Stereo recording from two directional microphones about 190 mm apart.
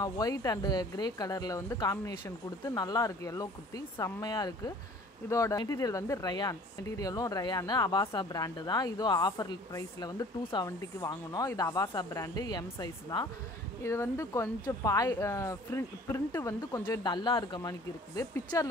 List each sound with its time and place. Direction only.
0.0 s speech: 20° left (ahead or behind)